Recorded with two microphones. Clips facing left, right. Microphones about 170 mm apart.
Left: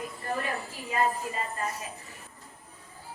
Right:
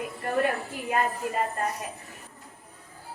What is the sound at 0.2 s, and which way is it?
A woman's voice, 65° right (ahead or behind).